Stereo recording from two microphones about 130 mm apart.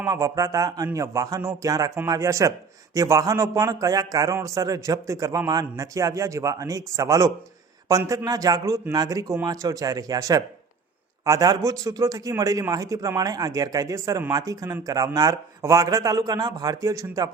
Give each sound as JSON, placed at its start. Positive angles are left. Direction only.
{"t": 0.0, "sound": "a man's voice", "side_deg": -25}